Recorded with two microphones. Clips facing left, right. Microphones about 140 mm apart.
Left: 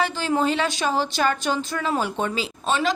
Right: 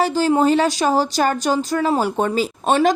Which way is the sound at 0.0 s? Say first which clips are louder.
Right 6 dB; 40° right (ahead or behind).